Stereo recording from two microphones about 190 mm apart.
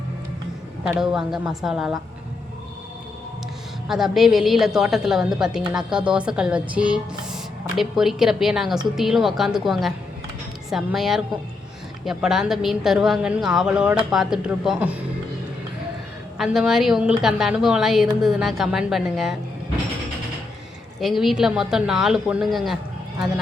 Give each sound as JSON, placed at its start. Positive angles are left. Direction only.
{"t": 0.9, "sound": "speech", "side_deg": -5}
{"t": 3.8, "sound": "speech", "side_deg": 0}
{"t": 16.4, "sound": "speech", "side_deg": 0}
{"t": 21.0, "sound": "speech", "side_deg": 0}